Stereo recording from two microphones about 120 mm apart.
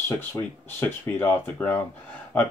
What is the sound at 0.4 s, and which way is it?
Speech, 15° left (ahead or behind).